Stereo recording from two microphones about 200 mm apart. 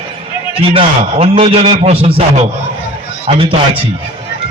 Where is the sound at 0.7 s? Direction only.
30° right (ahead or behind).